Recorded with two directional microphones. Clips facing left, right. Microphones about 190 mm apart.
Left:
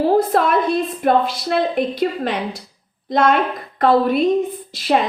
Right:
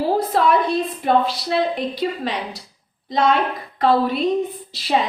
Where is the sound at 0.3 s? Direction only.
55° left (ahead or behind).